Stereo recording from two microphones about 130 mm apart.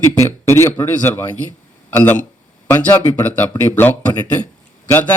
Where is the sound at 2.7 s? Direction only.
15° left (ahead or behind).